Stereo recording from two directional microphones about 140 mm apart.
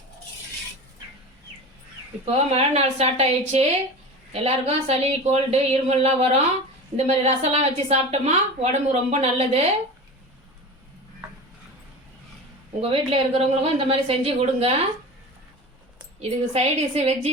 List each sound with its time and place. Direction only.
2.2 s a woman's voice: 50° right (ahead or behind)
12.8 s a woman's voice: 45° right (ahead or behind)
16.5 s a woman's voice: 45° right (ahead or behind)